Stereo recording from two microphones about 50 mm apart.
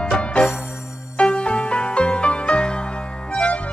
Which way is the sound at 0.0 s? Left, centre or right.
Centre.